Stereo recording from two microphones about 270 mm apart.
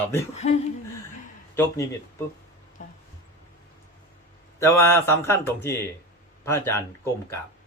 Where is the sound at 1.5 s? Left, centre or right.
Centre.